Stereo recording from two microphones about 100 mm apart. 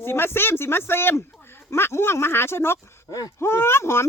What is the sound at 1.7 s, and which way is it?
Speech, 25° left (ahead or behind).